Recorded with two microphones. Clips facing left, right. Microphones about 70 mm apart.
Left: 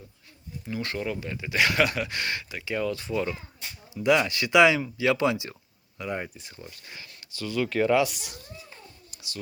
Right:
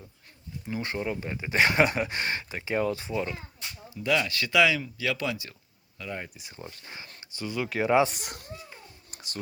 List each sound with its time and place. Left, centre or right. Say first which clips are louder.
0.7 s speech: even; right
3.8 s speech: left 4 dB; centre
6.8 s speech: right 1 dB; right
7.9 s speech: right 5 dB; right
8.2 s speech: right 3 dB; right
9.1 s a sound: right 1 dB; right